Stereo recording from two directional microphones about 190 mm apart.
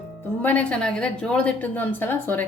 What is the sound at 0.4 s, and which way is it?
A woman's voice, 5° left (ahead or behind).